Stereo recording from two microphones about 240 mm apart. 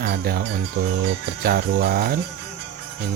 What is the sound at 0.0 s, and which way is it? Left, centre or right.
Music, right.